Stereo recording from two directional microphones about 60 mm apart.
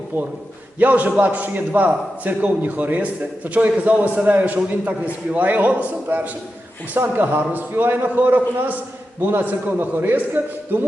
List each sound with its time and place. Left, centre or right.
0.8 s a man's voice: right